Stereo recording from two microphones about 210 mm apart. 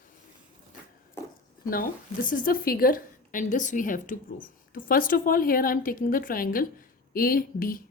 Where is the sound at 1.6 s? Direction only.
40° left (ahead or behind).